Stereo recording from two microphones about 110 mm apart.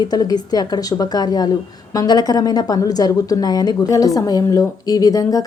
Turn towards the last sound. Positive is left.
turn(degrees=30)  # may be behind; listen again after turning